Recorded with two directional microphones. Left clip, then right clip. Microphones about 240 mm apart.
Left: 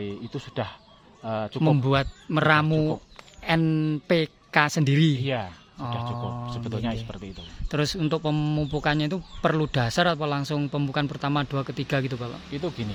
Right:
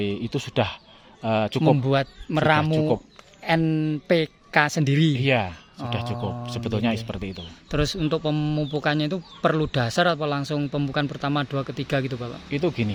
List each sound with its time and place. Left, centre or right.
0.0 s speech: right
1.8 s speech: centre
5.2 s speech: right
7.4 s speech: centre
12.5 s speech: right